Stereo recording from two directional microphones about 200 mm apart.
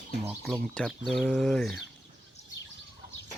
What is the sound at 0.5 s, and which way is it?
Speech, 5° left (ahead or behind).